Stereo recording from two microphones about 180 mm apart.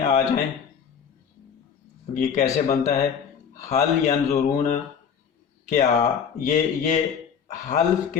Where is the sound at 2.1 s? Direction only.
45° left (ahead or behind).